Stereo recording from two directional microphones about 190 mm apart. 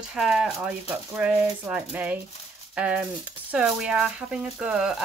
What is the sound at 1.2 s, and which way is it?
Rattle, 10° right (ahead or behind).